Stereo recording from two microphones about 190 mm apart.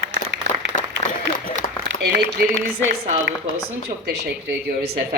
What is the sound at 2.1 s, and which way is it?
Speech, 55° right (ahead or behind).